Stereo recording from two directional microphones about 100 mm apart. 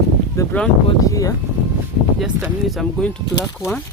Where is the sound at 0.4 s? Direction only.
30° left (ahead or behind).